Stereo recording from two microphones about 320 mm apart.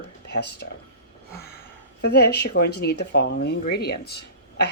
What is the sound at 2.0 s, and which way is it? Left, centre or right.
Speech, left.